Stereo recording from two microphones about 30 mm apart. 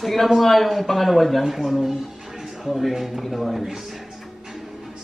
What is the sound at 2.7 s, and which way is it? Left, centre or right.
Speech, centre.